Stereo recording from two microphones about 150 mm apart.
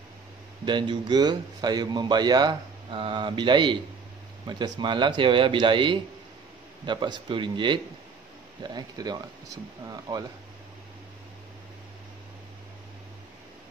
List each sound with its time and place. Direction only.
0.7 s speech: 30° right (ahead or behind)